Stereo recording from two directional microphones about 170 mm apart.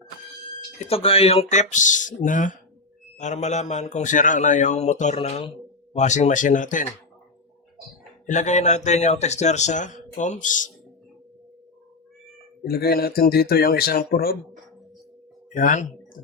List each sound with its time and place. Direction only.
0.8 s speech: 35° left (ahead or behind)
8.3 s speech: 45° left (ahead or behind)
12.6 s speech: 65° left (ahead or behind)
15.5 s speech: 50° left (ahead or behind)